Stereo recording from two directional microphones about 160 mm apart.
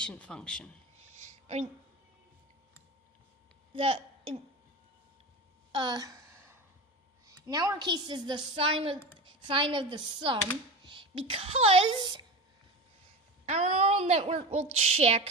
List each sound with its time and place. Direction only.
0.0 s speech: 5° left (ahead or behind)
3.8 s a woman's voice: 35° right (ahead or behind)
5.7 s a sound: 25° right (ahead or behind)
7.3 s a woman's voice: 25° right (ahead or behind)
13.4 s a woman's voice: 40° right (ahead or behind)